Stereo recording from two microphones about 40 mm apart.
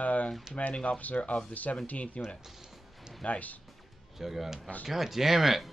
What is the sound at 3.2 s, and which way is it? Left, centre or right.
Speech, left.